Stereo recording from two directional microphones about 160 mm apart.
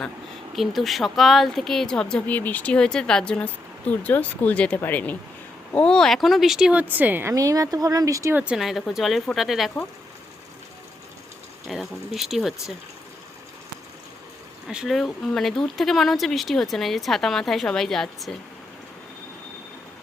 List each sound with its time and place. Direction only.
0.5 s a woman's voice: centre (ahead or behind)
11.7 s a woman's voice: centre (ahead or behind)
14.7 s a woman's voice: 5° right (ahead or behind)